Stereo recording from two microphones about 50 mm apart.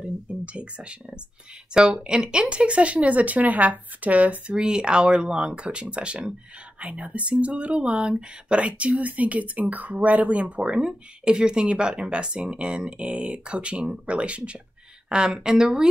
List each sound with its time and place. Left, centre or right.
0.0 s speech: right
4.6 s speech: centre